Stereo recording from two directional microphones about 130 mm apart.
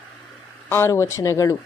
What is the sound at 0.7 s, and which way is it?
Speech, 20° left (ahead or behind).